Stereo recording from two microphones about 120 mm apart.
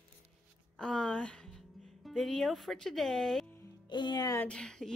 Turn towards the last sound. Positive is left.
turn(degrees=5)  # may be behind; listen again after turning